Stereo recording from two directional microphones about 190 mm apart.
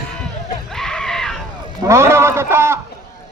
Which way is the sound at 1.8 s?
15° right (ahead or behind).